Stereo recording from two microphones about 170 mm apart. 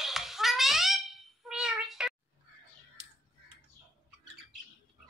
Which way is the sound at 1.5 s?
5° right (ahead or behind).